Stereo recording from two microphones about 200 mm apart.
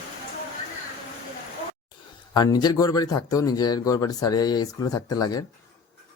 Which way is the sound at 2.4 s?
20° left (ahead or behind).